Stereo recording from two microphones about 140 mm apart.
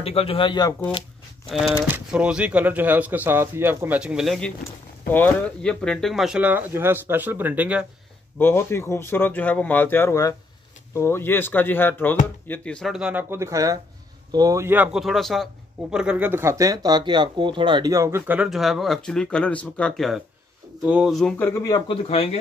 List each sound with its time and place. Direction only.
0.0 s speech: 45° left (ahead or behind)
1.9 s speech: 10° right (ahead or behind)
4.0 s speech: 5° right (ahead or behind)
5.1 s speech: 10° left (ahead or behind); by 7.8 s 10° right (ahead or behind)
8.4 s speech: 15° left (ahead or behind)
12.9 s speech: 5° right (ahead or behind)
13.3 s speech: 20° right (ahead or behind)
14.9 s speech: centre (ahead or behind); by 17.9 s 35° right (ahead or behind)
17.9 s speech: 20° right (ahead or behind)
18.5 s speech: centre (ahead or behind)
20.8 s speech: 5° right (ahead or behind)
21.4 s speech: 15° left (ahead or behind)
21.8 s speech: 45° left (ahead or behind)